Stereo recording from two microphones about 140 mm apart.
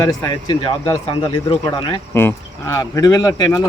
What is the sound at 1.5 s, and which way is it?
Speech, 35° left (ahead or behind).